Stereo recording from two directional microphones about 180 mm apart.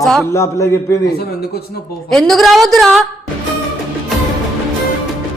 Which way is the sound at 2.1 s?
Centre (ahead or behind).